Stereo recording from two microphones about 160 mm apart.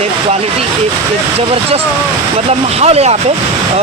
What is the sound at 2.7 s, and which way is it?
Speech, 40° right (ahead or behind).